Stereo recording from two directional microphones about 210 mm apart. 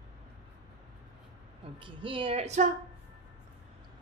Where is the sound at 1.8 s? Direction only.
25° right (ahead or behind).